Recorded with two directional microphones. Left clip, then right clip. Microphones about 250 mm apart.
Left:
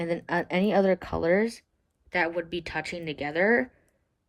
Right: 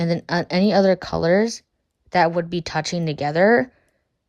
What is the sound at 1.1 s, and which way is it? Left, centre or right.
Speech, left.